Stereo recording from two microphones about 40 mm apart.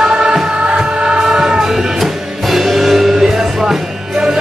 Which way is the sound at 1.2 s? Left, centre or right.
Centre.